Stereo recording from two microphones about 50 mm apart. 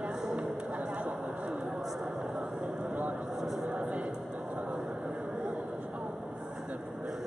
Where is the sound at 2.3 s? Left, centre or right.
Right.